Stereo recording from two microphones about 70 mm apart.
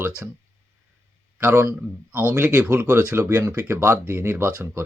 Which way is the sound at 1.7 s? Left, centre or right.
Right.